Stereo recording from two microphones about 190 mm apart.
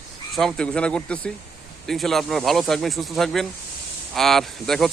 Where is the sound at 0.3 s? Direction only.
5° left (ahead or behind).